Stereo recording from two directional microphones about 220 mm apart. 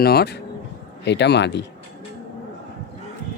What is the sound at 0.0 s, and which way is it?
Speech, 45° left (ahead or behind).